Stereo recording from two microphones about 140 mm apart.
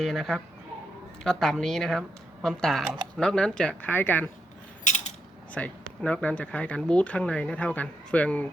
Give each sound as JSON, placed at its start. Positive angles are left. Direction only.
{"t": 0.0, "sound": "speech", "side_deg": 0}
{"t": 4.8, "sound": "a sound", "side_deg": 55}
{"t": 5.6, "sound": "speech", "side_deg": 10}